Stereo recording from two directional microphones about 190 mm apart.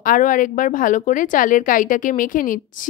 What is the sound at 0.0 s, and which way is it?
A woman's voice, 45° left (ahead or behind).